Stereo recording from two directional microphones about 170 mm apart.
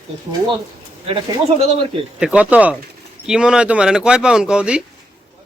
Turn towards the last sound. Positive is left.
turn(degrees=-5)  # may be behind; listen again after turning